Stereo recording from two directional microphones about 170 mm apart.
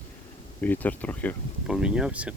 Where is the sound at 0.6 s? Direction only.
10° left (ahead or behind).